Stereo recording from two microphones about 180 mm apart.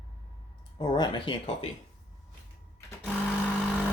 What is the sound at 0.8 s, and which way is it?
Speech, 25° left (ahead or behind).